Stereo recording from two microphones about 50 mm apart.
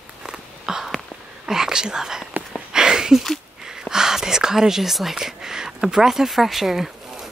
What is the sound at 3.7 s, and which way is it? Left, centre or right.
Whispering, centre.